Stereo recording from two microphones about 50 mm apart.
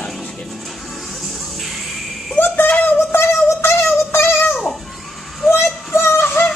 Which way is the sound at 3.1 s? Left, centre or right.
Left.